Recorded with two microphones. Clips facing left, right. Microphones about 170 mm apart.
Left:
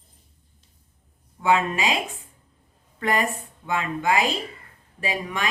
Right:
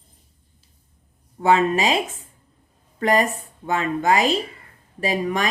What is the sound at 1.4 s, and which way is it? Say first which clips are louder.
Speech: right 4 dB; 40° right (ahead or behind).